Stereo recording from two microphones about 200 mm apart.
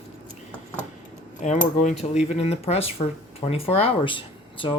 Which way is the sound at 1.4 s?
40° left (ahead or behind).